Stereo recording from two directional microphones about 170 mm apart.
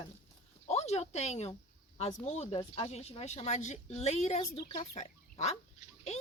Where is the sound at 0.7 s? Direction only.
40° left (ahead or behind).